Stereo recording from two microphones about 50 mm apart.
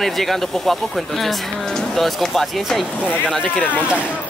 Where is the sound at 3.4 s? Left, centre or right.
Left.